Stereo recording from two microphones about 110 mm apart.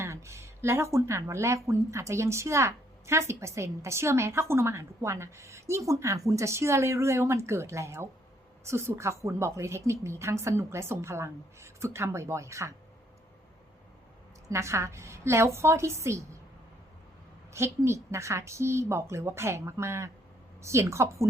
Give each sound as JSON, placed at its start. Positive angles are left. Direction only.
{"t": 0.0, "sound": "speech", "side_deg": -25}
{"t": 14.5, "sound": "speech", "side_deg": -25}
{"t": 17.5, "sound": "speech", "side_deg": -25}